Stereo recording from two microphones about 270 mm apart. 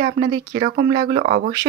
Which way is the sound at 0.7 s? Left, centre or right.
Right.